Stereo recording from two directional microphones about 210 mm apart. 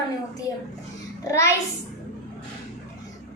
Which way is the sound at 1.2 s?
15° left (ahead or behind).